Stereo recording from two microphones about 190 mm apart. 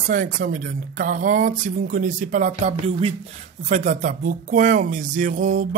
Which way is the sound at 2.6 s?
30° right (ahead or behind).